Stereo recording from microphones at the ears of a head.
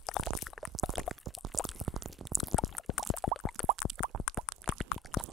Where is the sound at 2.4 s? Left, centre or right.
Left.